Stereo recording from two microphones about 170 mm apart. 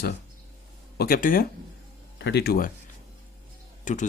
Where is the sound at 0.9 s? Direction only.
60° left (ahead or behind).